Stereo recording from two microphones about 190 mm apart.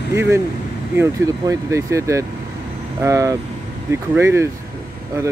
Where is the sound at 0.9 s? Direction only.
15° right (ahead or behind).